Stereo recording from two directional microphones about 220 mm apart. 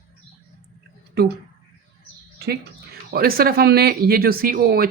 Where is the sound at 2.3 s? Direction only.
50° right (ahead or behind).